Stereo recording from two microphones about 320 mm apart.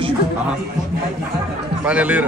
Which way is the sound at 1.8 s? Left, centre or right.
Centre.